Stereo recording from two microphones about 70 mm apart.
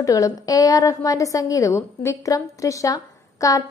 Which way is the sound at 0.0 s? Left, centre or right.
Left.